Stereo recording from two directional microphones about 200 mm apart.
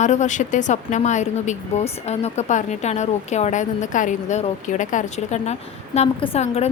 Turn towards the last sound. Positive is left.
turn(degrees=30)  # may be behind; listen again after turning